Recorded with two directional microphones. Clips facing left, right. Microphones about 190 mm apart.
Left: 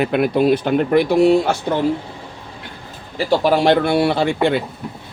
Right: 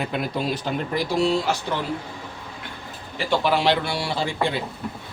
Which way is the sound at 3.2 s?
40° left (ahead or behind).